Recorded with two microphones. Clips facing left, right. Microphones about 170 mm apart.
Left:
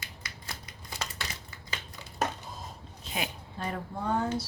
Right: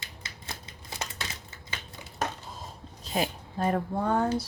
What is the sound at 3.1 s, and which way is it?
A woman's voice, 45° right (ahead or behind).